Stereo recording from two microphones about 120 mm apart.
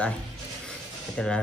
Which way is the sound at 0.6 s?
10° left (ahead or behind).